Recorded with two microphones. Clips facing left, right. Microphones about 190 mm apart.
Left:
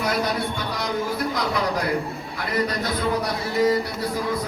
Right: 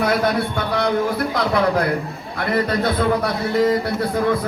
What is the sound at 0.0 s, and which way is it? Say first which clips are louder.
Speech: right 5 dB; 60° right (ahead or behind).